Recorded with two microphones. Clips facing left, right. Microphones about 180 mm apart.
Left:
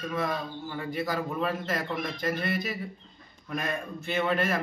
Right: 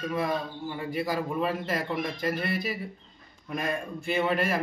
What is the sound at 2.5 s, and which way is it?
Speech, 35° right (ahead or behind).